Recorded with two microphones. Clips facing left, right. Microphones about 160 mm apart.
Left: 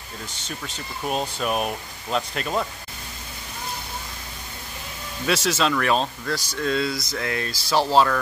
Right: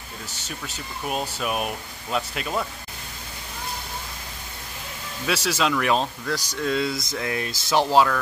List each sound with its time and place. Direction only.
0.3 s speech: 10° right (ahead or behind)
5.2 s speech: 10° right (ahead or behind)